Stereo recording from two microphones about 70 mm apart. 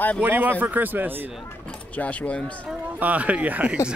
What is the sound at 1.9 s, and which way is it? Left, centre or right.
Speech, left.